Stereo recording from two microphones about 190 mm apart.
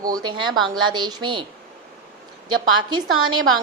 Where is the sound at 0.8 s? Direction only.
25° right (ahead or behind).